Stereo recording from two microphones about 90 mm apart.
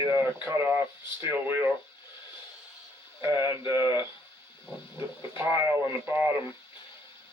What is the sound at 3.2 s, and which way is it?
Speech, 25° right (ahead or behind).